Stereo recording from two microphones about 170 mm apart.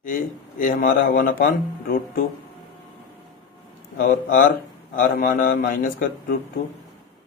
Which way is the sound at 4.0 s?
60° left (ahead or behind).